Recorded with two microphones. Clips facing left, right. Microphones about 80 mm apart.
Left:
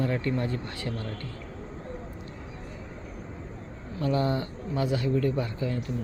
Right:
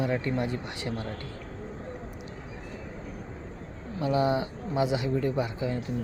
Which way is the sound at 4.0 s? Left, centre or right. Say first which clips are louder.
Right 1 dB; centre.